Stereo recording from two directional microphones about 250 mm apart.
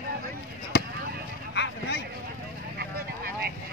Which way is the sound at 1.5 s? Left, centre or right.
Left.